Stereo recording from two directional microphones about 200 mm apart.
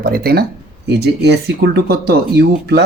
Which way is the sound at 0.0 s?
50° right (ahead or behind).